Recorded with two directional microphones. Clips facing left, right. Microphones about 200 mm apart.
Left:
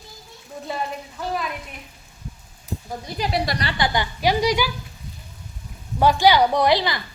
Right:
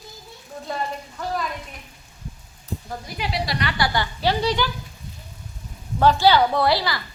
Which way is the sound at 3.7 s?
20° left (ahead or behind).